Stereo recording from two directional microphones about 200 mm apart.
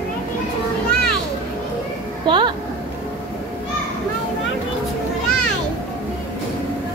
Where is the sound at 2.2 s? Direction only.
25° right (ahead or behind).